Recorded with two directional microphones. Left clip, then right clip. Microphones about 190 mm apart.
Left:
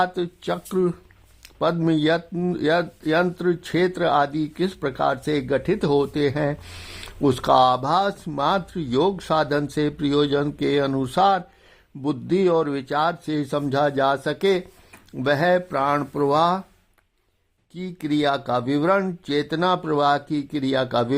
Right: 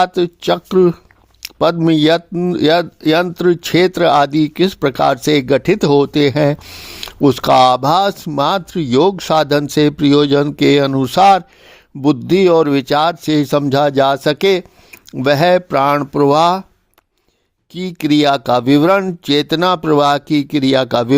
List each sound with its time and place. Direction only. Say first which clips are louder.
0.0 s speech: right 9 dB; 40° right (ahead or behind)
17.7 s speech: right 10 dB; 45° right (ahead or behind)